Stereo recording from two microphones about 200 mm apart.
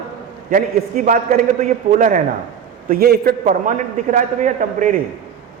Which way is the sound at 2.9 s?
50° right (ahead or behind).